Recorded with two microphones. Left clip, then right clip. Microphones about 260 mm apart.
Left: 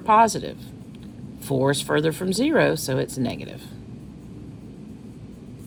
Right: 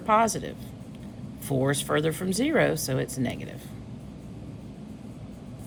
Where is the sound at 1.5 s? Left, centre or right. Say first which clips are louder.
Left 4 dB; left.